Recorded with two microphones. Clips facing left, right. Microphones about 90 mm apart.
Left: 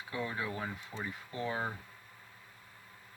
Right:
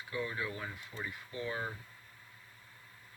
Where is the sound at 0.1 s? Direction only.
30° left (ahead or behind).